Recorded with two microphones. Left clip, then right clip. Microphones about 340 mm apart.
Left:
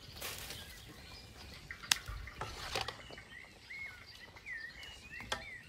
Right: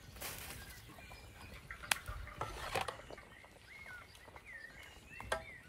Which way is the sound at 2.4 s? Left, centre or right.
Right.